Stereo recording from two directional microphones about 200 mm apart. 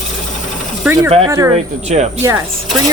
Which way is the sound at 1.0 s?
30° right (ahead or behind).